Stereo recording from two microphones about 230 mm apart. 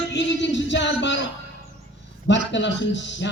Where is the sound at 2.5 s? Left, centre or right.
Left.